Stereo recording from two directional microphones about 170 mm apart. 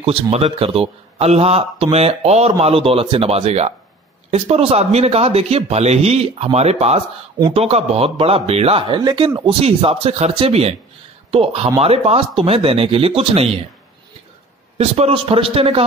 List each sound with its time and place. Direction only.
0.0 s speech: 35° right (ahead or behind); by 9.6 s 20° right (ahead or behind)
9.6 s speech: 35° right (ahead or behind)
14.8 s speech: 35° right (ahead or behind)